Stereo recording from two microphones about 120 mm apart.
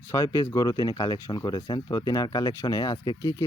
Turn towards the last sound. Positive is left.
turn(degrees=20)  # may be behind; listen again after turning